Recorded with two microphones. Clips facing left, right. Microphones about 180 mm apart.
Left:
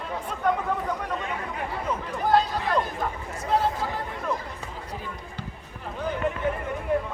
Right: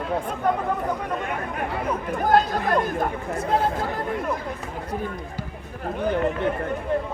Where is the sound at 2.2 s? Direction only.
50° right (ahead or behind).